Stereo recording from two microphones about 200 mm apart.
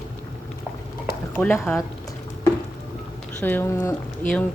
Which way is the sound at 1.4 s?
10° left (ahead or behind).